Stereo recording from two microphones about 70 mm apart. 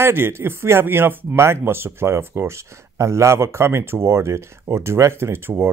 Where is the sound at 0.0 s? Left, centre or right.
Right.